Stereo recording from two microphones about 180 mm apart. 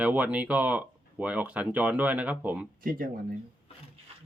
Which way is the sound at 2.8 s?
50° right (ahead or behind).